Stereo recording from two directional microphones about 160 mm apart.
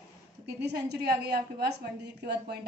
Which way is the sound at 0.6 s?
90° right.